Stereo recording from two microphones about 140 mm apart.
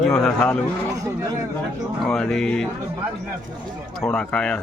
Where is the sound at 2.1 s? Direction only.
5° left (ahead or behind).